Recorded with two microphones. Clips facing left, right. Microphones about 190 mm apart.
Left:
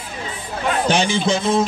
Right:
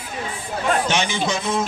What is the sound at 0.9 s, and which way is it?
Speech, 30° left (ahead or behind).